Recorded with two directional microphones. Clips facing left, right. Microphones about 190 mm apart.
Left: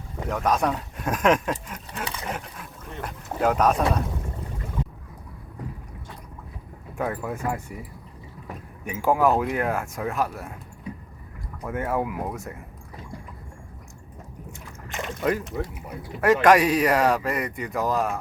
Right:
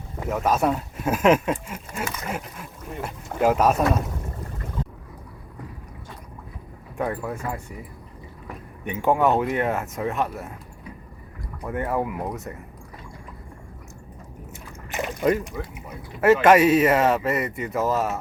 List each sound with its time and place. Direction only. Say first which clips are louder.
0.3 s speech: right 2 dB; 5° right (ahead or behind)
6.9 s speech: right 1 dB; centre (ahead or behind)
8.8 s speech: right 1 dB; centre (ahead or behind)
11.6 s speech: right 1 dB; centre (ahead or behind)
14.9 s a sound: right 4 dB; 20° right (ahead or behind)
15.2 s speech: right 3 dB; 5° right (ahead or behind)